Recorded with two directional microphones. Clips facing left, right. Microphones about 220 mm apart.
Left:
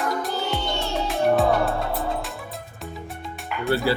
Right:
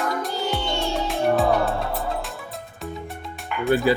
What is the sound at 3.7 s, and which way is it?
Speech, 15° right (ahead or behind).